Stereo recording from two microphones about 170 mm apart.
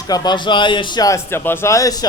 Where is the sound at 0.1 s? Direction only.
25° left (ahead or behind).